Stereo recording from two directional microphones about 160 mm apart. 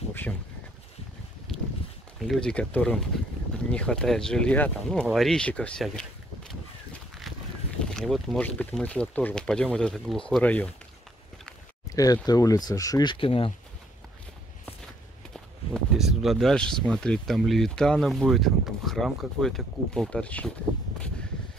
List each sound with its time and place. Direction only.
0.1 s a sound: 10° left (ahead or behind)
1.5 s a sound: centre (ahead or behind)
2.1 s speech: centre (ahead or behind)
7.9 s speech: centre (ahead or behind)
11.9 s speech: 25° left (ahead or behind)
15.3 s speech: centre (ahead or behind)